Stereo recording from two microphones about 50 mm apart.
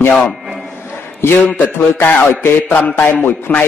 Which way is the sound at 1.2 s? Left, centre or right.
Left.